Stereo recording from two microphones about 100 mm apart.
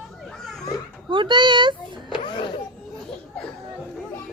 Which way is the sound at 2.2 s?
55° left (ahead or behind).